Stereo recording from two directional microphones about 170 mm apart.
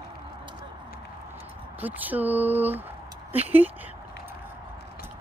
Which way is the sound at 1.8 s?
10° right (ahead or behind).